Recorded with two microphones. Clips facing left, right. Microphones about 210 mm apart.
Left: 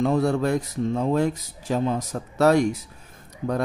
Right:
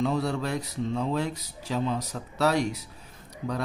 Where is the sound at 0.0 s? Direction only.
50° left (ahead or behind).